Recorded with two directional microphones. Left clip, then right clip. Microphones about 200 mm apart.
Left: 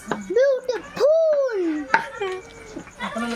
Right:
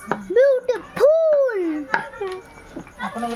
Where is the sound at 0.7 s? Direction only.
10° right (ahead or behind).